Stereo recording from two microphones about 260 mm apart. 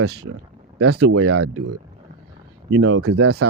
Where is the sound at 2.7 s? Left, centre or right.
Right.